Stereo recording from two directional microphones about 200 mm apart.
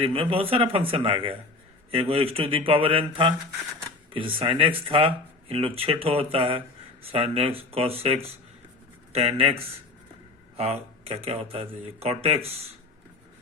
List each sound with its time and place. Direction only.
0.0 s speech: 25° right (ahead or behind)